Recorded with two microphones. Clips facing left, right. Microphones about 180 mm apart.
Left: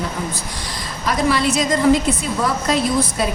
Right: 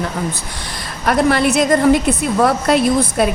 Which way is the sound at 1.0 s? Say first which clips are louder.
Right 4 dB; 60° right (ahead or behind).